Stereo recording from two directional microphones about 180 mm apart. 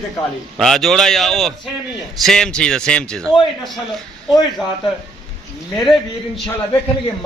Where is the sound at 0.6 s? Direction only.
Centre (ahead or behind).